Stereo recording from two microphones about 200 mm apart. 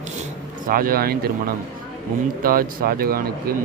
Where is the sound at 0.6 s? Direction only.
45° right (ahead or behind).